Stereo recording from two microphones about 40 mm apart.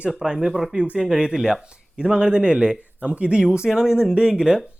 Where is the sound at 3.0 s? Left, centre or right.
Right.